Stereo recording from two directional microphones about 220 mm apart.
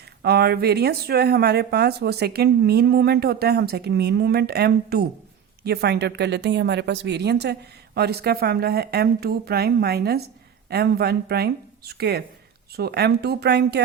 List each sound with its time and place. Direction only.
0.2 s speech: 45° right (ahead or behind)